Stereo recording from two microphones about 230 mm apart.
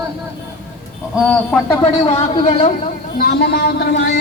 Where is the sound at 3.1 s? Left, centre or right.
Left.